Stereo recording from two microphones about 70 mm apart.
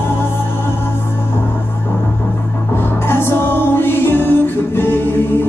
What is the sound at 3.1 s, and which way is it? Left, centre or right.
Music, left.